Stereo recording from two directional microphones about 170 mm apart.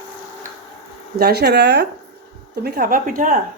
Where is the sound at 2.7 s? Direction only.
60° right (ahead or behind).